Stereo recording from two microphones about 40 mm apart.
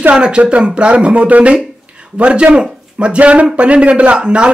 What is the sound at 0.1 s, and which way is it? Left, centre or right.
A man's voice, right.